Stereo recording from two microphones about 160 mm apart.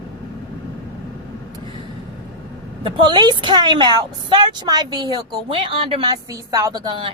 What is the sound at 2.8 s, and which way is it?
A woman's voice, 30° right (ahead or behind).